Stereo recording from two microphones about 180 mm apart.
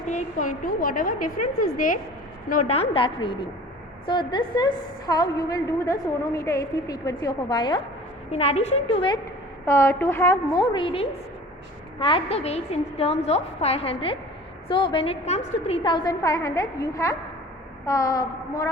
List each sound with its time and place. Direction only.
0.1 s a woman's voice: 45° left (ahead or behind); by 7.8 s 25° left (ahead or behind)
8.3 s a woman's voice: 35° left (ahead or behind)
9.6 s a woman's voice: 15° left (ahead or behind)